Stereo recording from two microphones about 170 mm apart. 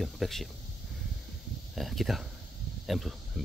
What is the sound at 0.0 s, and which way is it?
Speech, centre (ahead or behind).